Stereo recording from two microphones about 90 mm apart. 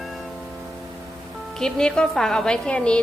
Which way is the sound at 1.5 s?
5° left (ahead or behind).